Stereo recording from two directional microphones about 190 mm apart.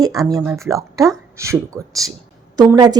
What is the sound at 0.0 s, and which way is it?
Speech, 20° right (ahead or behind).